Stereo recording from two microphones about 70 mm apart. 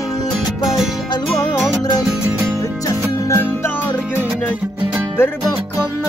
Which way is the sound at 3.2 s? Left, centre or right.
Left.